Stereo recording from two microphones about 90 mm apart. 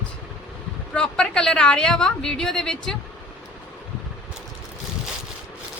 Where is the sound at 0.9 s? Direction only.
10° left (ahead or behind).